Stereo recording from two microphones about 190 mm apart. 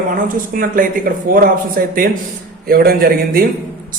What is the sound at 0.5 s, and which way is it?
A man's voice, 45° right (ahead or behind).